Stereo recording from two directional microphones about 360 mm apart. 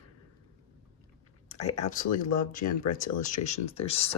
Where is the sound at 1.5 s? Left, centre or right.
Centre.